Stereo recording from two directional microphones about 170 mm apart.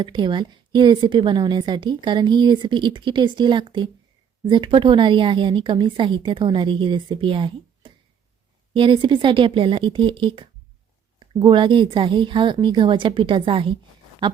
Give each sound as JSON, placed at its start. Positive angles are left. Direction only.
{"t": 0.0, "sound": "a woman's voice", "side_deg": -25}